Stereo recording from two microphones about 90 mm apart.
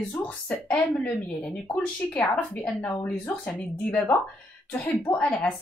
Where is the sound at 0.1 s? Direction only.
15° left (ahead or behind).